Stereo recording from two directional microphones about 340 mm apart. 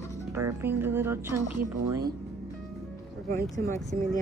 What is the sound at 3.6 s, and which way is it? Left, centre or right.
Speech, centre.